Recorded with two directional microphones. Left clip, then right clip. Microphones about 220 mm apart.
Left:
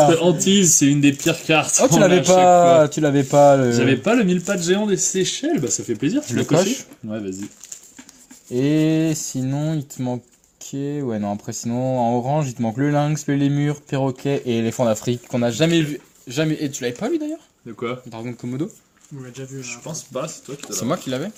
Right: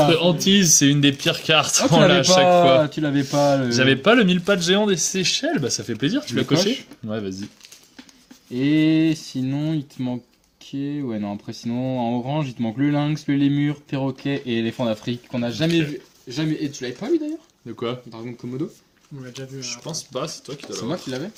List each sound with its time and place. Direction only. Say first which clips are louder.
0.2 s speech: left 1 dB; 25° right (ahead or behind); by 1.8 s 45° right (ahead or behind)
1.8 s speech: left 1 dB; 35° left (ahead or behind)
3.8 s speech: right 2 dB; 45° right (ahead or behind)
8.5 s speech: even; 35° left (ahead or behind); by 18.6 s 55° left (ahead or behind)
19.8 s speech: left 1 dB; 45° right (ahead or behind)
20.7 s speech: left 5 dB; 50° left (ahead or behind)